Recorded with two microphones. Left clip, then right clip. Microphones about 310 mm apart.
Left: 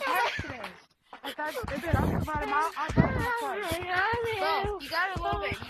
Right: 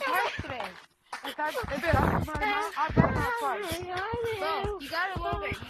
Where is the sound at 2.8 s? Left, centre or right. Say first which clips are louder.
Right 2 dB; centre.